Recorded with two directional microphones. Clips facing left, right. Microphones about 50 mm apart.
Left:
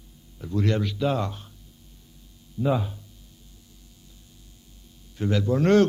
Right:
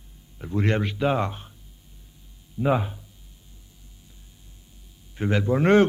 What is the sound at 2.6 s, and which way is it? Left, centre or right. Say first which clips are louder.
Speech: right 2 dB; right.